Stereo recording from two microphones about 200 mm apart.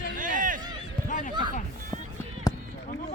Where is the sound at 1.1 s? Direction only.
40° left (ahead or behind).